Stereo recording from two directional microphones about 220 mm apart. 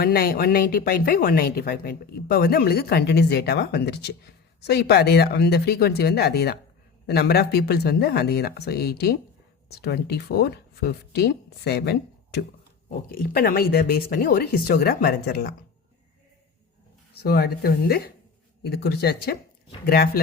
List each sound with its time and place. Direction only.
0.0 s speech: 45° left (ahead or behind)
17.2 s speech: 45° left (ahead or behind)